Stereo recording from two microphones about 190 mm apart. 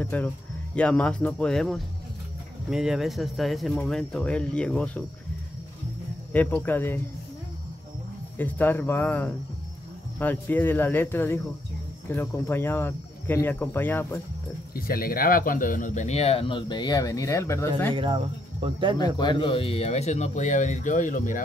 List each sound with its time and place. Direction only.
0.0 s speech: 10° left (ahead or behind)
6.3 s speech: 10° left (ahead or behind)
8.4 s speech: 10° left (ahead or behind)
14.7 s speech: 50° left (ahead or behind); by 17.6 s 15° left (ahead or behind)
17.9 s speech: 25° right (ahead or behind)
18.9 s speech: 20° left (ahead or behind); by 21.5 s 45° left (ahead or behind)